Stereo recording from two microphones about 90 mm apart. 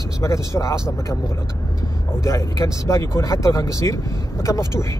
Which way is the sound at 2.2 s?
35° left (ahead or behind).